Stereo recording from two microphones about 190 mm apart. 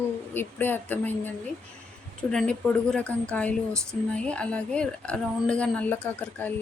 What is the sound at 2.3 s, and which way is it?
Speech, 5° left (ahead or behind).